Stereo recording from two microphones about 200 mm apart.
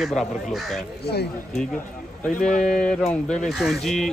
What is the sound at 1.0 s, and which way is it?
Speech, 55° left (ahead or behind).